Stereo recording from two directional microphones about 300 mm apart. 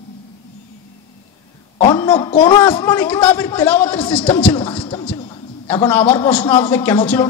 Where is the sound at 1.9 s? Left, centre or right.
Centre.